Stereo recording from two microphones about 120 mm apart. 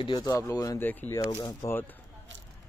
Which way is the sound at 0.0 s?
35° left (ahead or behind).